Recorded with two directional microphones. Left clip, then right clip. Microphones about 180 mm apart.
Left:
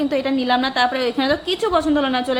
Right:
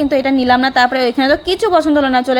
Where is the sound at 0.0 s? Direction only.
30° right (ahead or behind).